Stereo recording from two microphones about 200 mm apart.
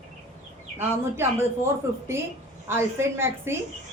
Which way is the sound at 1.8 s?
15° right (ahead or behind).